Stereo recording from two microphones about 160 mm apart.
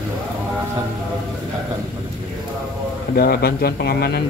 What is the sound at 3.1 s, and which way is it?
Speech, 75° left (ahead or behind).